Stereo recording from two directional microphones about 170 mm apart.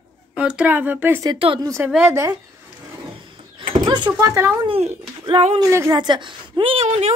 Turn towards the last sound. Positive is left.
turn(degrees=-40)  # may be behind; listen again after turning